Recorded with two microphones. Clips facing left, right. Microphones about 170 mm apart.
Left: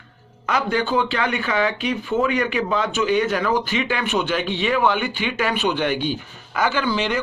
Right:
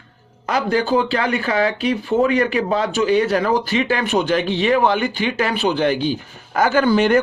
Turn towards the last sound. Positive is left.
turn(degrees=-50)  # may be behind; listen again after turning